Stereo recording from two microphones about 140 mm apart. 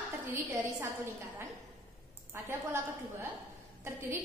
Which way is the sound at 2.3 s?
15° right (ahead or behind).